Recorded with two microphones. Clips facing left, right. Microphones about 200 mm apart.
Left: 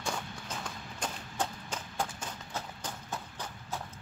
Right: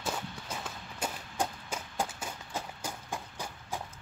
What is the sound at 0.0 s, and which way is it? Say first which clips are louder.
Run: right 1 dB; 5° right (ahead or behind).